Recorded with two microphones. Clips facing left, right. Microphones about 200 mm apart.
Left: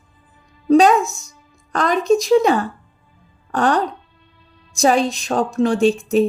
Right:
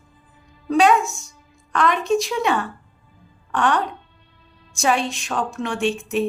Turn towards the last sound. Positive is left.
turn(degrees=35)  # may be behind; listen again after turning